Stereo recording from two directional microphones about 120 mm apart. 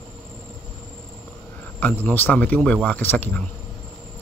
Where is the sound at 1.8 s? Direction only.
15° left (ahead or behind).